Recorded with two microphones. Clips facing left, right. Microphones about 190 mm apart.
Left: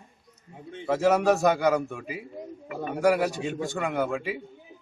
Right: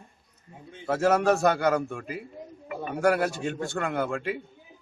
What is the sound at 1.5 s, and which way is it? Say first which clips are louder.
A man's voice: left 1 dB; 15° left (ahead or behind).